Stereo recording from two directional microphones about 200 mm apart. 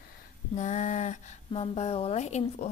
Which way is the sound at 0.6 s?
35° left (ahead or behind).